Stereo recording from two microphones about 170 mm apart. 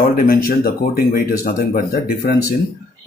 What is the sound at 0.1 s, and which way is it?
Speech, 60° left (ahead or behind).